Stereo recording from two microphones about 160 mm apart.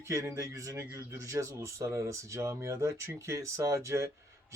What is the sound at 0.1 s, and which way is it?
Speech, 20° right (ahead or behind).